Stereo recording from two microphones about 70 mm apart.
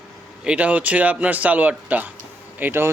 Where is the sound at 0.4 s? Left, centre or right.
Centre.